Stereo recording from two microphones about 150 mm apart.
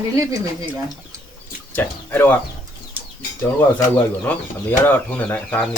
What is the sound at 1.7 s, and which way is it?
Speech, 15° left (ahead or behind).